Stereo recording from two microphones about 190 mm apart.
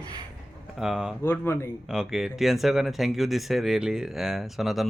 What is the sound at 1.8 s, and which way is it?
Speech, 5° right (ahead or behind).